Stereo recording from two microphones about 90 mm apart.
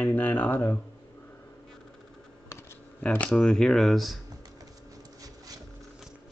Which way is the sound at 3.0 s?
15° left (ahead or behind).